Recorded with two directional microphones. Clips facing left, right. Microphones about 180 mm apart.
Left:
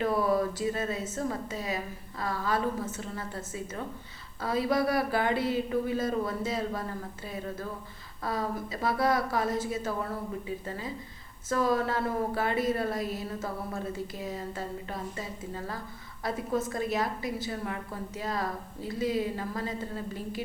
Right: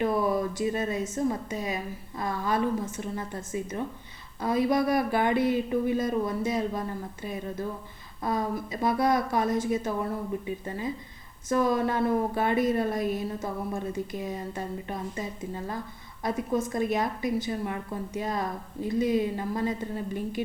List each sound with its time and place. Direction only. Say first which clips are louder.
0.0 s a sound: right 1 dB; 15° right (ahead or behind)
0.7 s a woman's voice: right 3 dB; 15° right (ahead or behind)
8.2 s speech: right 3 dB; 20° right (ahead or behind)
11.4 s a woman's voice: right 2 dB; 20° right (ahead or behind)